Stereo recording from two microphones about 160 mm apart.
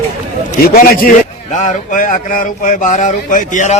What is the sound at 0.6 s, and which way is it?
Speech, 70° left (ahead or behind).